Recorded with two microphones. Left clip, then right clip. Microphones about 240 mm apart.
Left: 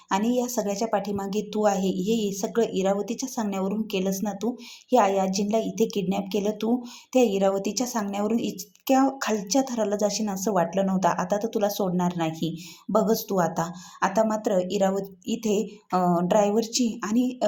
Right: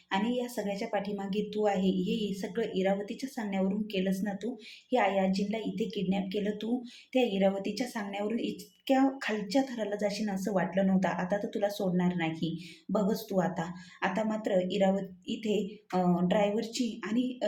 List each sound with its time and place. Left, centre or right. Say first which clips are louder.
0.1 s speech: left 7 dB; left